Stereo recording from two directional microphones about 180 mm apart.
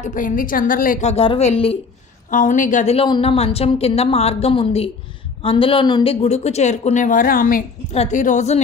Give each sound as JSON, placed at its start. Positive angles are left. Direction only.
{"t": 0.0, "sound": "a woman's voice", "side_deg": 45}
{"t": 1.1, "sound": "a woman's voice", "side_deg": 35}
{"t": 2.3, "sound": "a woman's voice", "side_deg": 45}
{"t": 6.2, "sound": "a woman's voice", "side_deg": 35}
{"t": 7.9, "sound": "a woman's voice", "side_deg": 40}